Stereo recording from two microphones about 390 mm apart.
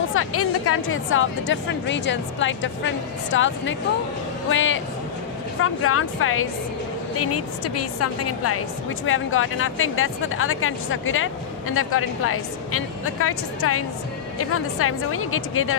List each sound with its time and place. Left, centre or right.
0.1 s a woman's voice: left